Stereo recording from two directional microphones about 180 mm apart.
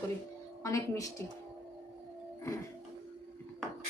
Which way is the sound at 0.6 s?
15° left (ahead or behind).